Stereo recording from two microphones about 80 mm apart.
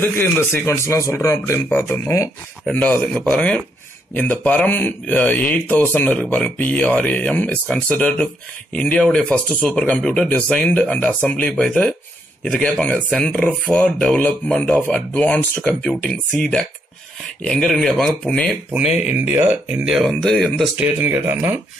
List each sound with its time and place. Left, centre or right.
0.0 s speech: left
3.2 s speech: centre
8.7 s speech: centre
18.8 s speech: centre
19.8 s speech: centre
20.1 s speech: centre
20.7 s speech: right